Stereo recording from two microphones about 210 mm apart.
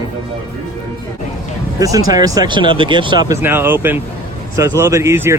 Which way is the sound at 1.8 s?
15° right (ahead or behind).